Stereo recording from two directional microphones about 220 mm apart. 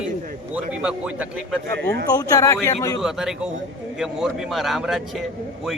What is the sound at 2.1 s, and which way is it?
Speech, 15° left (ahead or behind).